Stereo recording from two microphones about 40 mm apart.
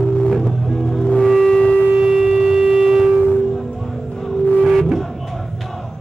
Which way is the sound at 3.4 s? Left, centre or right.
Centre.